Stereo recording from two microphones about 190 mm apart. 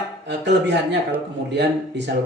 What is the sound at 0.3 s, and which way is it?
Speech, 65° right (ahead or behind).